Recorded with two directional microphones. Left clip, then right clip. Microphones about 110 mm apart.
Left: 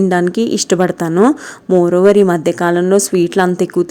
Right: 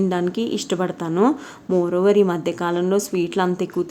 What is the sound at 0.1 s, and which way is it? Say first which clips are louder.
A woman's voice: left 8 dB; 60° left (ahead or behind).